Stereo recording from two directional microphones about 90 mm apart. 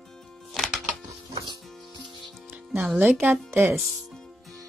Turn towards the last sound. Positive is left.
turn(degrees=-25)  # may be behind; listen again after turning